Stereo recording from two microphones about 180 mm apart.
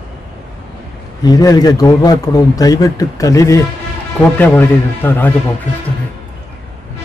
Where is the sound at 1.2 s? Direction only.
20° left (ahead or behind).